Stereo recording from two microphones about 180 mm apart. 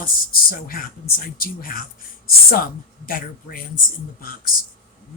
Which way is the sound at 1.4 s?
55° left (ahead or behind).